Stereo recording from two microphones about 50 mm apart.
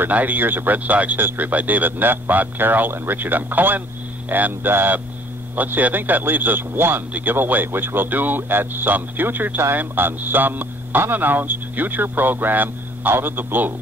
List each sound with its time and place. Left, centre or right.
0.1 s a man's voice: right
1.2 s speech: right
1.5 s a man's voice: right